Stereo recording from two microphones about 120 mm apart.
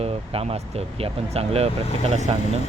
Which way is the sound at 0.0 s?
60° right (ahead or behind).